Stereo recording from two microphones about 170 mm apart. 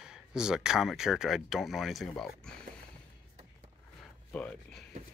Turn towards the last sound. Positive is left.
turn(degrees=5)  # may be behind; listen again after turning